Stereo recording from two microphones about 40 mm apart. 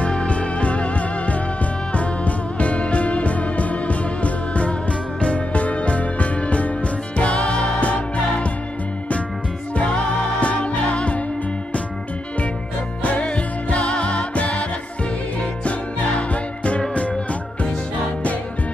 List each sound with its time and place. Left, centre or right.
0.0 s music: left
10.4 s music: left
13.0 s music: left